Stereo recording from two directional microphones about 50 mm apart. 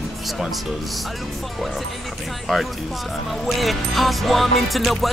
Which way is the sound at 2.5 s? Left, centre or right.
Centre.